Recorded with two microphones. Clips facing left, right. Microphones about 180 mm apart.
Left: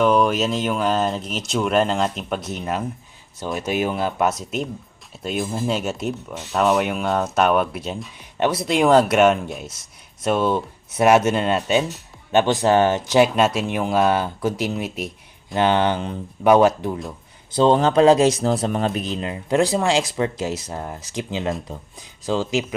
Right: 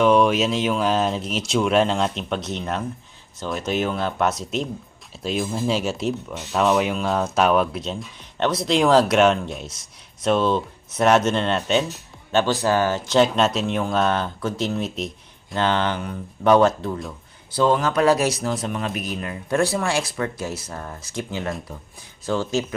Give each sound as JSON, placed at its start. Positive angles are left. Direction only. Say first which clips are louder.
{"t": 0.0, "sound": "speech", "louder": "right 1 dB", "side_deg": 0}
{"t": 12.3, "sound": "speech", "louder": "left 3 dB", "side_deg": 20}
{"t": 17.6, "sound": "speech", "louder": "left 4 dB", "side_deg": 25}